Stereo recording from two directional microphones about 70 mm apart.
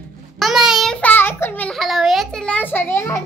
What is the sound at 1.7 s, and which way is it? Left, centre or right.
Speech, centre.